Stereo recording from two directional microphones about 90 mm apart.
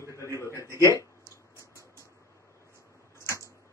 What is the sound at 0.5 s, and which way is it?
Speech, 30° right (ahead or behind).